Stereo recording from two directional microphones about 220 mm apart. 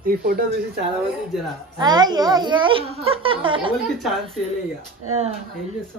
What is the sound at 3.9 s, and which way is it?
Speech, centre (ahead or behind).